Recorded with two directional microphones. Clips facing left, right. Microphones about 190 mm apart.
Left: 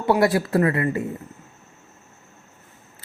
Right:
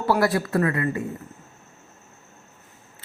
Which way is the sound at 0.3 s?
25° left (ahead or behind).